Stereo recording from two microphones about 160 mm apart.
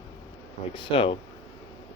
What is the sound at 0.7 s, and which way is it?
Speech, 30° left (ahead or behind).